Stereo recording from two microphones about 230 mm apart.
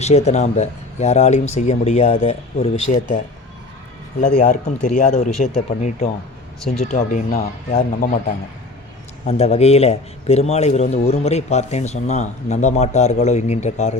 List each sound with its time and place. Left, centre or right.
0.0 s speech: left
4.4 s speech: left
9.2 s speech: left